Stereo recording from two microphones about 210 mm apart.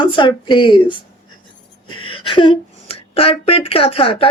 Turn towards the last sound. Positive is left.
turn(degrees=25)  # may be behind; listen again after turning